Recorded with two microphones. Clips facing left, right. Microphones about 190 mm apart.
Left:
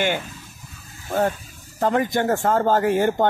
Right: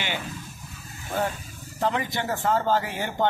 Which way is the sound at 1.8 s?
45° left (ahead or behind).